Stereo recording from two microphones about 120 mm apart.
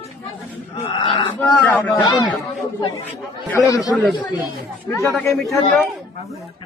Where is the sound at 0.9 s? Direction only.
45° left (ahead or behind).